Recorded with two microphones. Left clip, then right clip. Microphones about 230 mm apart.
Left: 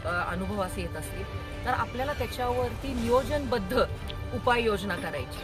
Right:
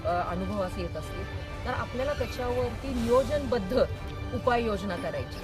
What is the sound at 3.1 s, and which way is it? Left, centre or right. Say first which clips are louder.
Speech: right 1 dB; centre.